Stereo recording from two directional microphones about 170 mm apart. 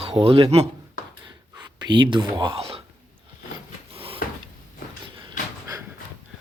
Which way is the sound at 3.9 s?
35° right (ahead or behind).